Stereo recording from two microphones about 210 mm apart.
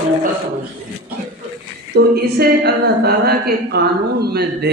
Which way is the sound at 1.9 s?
50° right (ahead or behind).